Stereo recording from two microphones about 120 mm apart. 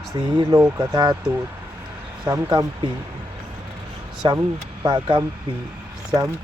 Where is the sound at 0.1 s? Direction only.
40° right (ahead or behind).